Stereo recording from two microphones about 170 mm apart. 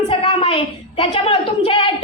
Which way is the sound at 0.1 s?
35° left (ahead or behind).